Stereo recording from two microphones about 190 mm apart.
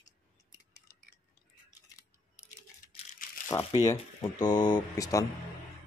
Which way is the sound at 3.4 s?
15° left (ahead or behind).